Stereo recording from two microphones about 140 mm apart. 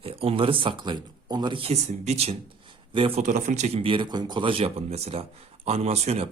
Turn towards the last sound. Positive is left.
turn(degrees=-45)  # may be behind; listen again after turning